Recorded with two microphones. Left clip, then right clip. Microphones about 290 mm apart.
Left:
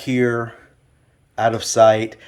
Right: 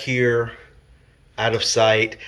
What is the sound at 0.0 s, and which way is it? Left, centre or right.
Speech, left.